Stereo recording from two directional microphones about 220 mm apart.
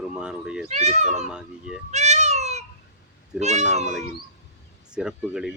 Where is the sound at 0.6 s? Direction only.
30° right (ahead or behind).